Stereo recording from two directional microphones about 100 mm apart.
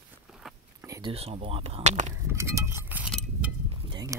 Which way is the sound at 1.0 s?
80° right.